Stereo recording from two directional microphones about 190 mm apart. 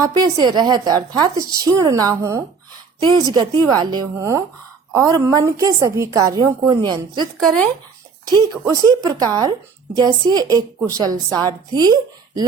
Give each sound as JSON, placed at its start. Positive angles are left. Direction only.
{"t": 0.0, "sound": "a woman's voice", "side_deg": -20}
{"t": 7.3, "sound": "speech", "side_deg": 5}
{"t": 8.3, "sound": "a woman's voice", "side_deg": -20}